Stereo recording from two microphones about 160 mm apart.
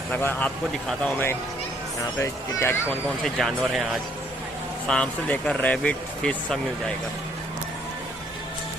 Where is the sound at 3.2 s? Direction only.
Centre (ahead or behind).